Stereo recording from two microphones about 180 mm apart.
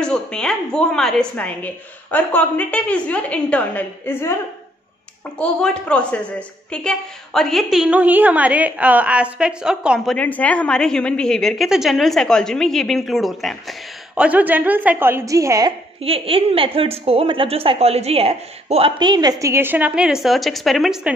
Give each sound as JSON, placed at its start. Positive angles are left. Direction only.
{"t": 0.0, "sound": "a woman's voice", "side_deg": 5}
{"t": 5.4, "sound": "a woman's voice", "side_deg": 5}
{"t": 10.1, "sound": "a woman's voice", "side_deg": 10}
{"t": 16.0, "sound": "a woman's voice", "side_deg": -30}